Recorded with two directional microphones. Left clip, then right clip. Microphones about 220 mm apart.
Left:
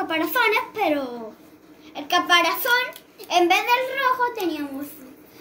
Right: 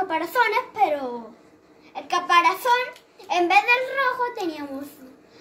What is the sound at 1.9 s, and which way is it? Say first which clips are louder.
A child's voice: left 1 dB; 15° right (ahead or behind).